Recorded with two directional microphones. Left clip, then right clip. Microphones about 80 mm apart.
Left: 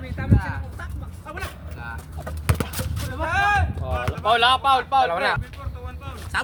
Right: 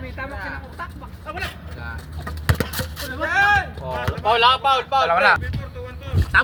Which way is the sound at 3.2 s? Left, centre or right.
Left.